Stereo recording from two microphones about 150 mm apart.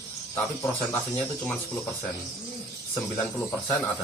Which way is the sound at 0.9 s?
15° left (ahead or behind).